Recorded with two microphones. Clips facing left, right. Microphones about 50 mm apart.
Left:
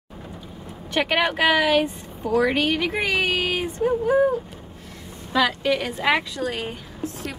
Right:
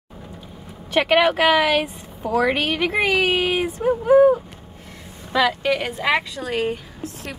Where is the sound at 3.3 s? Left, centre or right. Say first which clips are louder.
Right 4 dB; centre.